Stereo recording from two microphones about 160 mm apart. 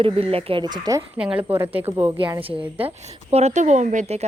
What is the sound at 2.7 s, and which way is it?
Speech, 40° right (ahead or behind).